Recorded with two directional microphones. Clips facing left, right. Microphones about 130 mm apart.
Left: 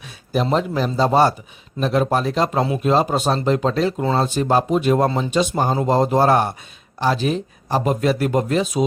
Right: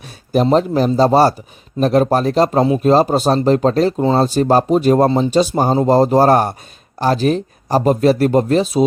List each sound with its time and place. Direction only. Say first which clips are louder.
0.5 s speech: right 6 dB; 40° right (ahead or behind)